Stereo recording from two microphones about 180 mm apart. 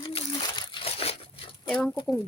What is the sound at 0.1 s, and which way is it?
Crumpling, 35° left (ahead or behind).